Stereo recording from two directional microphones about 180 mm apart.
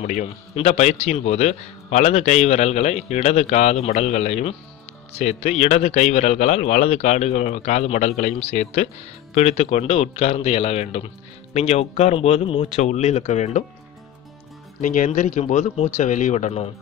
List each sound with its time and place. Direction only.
0.0 s a man's voice: 45° left (ahead or behind)
14.8 s a man's voice: 45° left (ahead or behind)